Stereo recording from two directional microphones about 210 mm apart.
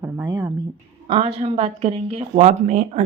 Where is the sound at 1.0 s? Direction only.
30° right (ahead or behind).